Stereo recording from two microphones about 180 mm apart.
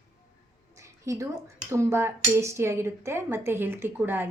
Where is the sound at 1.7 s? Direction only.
15° right (ahead or behind).